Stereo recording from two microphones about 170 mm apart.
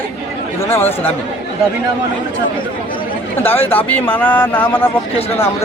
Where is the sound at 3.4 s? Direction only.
10° left (ahead or behind).